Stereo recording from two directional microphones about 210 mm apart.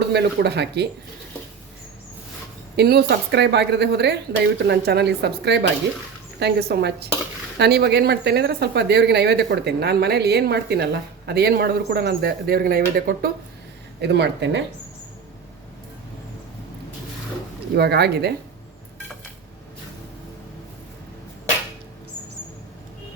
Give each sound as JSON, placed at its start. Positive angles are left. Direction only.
{"t": 0.0, "sound": "speech", "side_deg": -50}
{"t": 2.7, "sound": "speech", "side_deg": -50}
{"t": 17.7, "sound": "speech", "side_deg": -50}